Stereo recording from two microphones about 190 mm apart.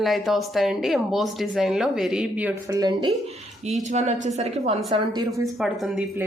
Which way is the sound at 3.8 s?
35° right (ahead or behind).